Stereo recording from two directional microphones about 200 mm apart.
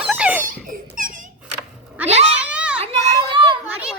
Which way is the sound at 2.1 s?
30° right (ahead or behind).